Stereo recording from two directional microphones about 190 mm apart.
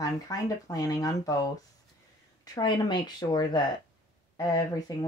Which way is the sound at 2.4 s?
20° left (ahead or behind).